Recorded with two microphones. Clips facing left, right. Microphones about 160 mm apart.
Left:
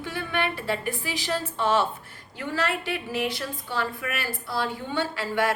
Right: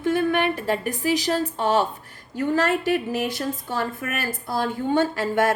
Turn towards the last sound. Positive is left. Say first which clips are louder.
# right 5 dB
turn(degrees=-45)  # may be behind; listen again after turning